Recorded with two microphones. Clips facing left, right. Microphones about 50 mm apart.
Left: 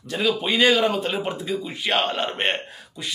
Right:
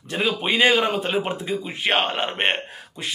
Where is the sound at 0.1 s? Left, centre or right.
Right.